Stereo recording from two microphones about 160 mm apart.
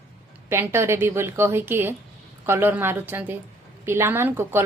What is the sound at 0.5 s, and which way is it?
A woman's voice, 15° right (ahead or behind).